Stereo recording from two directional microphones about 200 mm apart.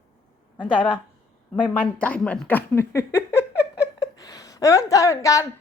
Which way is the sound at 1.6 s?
10° left (ahead or behind).